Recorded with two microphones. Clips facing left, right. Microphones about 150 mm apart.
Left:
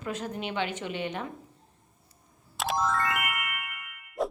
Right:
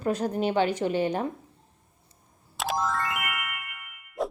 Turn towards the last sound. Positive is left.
turn(degrees=0)  # may be behind; listen again after turning